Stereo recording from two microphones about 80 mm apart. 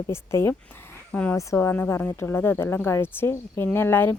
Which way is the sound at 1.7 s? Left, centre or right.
Left.